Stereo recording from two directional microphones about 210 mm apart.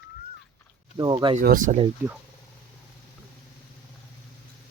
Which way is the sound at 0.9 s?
20° right (ahead or behind).